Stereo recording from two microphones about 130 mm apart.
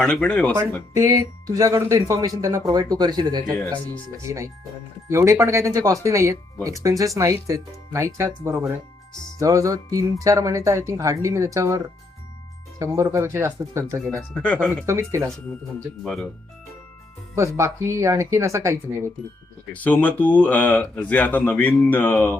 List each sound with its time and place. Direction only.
0.0 s speech: 10° left (ahead or behind)
0.5 s speech: 20° right (ahead or behind)
3.6 s speech: 10° left (ahead or behind)
4.2 s speech: 25° right (ahead or behind)
12.8 s speech: 20° right (ahead or behind)
14.0 s speech: 5° left (ahead or behind)
14.8 s speech: 20° right (ahead or behind)
17.3 s speech: 20° right (ahead or behind)
19.7 s speech: 10° left (ahead or behind)